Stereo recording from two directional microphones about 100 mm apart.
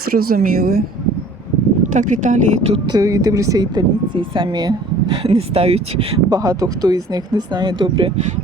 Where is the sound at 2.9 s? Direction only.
35° right (ahead or behind); by 6.1 s 90° right.